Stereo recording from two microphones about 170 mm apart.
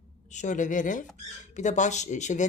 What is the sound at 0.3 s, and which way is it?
Speech, 45° left (ahead or behind).